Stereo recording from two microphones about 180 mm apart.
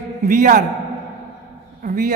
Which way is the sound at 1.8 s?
50° right (ahead or behind).